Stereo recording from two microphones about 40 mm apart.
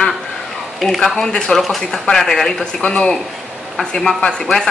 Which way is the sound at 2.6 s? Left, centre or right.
Left.